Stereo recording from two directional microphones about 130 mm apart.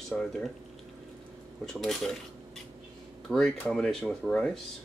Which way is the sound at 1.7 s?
Centre (ahead or behind).